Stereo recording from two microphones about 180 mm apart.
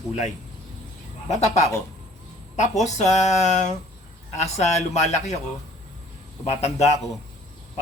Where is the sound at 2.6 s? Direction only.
40° left (ahead or behind).